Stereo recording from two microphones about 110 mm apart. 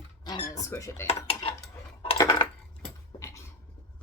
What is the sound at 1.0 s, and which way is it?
Dishes, 60° left (ahead or behind).